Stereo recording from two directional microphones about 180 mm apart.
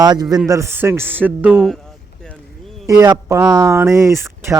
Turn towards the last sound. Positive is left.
turn(degrees=-15)  # may be behind; listen again after turning